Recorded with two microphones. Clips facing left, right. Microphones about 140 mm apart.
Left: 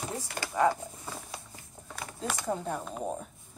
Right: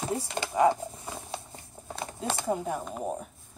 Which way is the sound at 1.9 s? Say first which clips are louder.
Right 3 dB; 25° right (ahead or behind).